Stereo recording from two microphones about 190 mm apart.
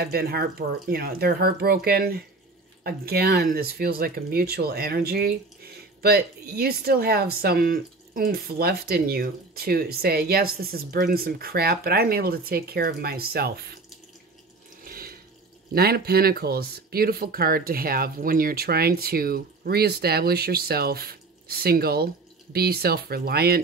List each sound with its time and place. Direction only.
0.0 s speech: 55° right (ahead or behind)
14.9 s water: 50° right (ahead or behind)
15.7 s speech: 55° right (ahead or behind)